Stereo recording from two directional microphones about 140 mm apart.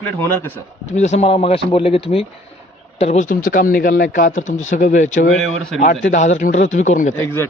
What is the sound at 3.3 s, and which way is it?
Speech, 85° left.